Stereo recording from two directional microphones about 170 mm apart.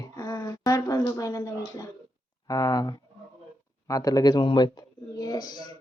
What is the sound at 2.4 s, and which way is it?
A man's voice, 20° left (ahead or behind).